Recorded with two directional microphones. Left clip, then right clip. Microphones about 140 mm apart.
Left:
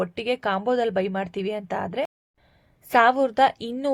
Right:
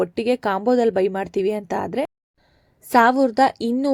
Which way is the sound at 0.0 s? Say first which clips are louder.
Right 4 dB; 50° right (ahead or behind).